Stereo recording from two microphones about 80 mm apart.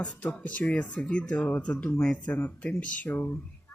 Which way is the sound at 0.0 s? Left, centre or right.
Centre.